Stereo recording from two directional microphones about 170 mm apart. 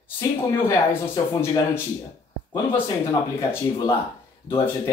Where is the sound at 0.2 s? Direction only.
20° left (ahead or behind).